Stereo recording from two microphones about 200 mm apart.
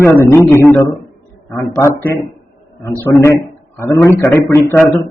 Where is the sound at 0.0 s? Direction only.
10° left (ahead or behind).